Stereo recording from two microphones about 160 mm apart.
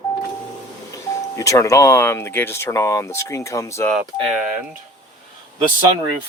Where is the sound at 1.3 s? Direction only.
20° left (ahead or behind).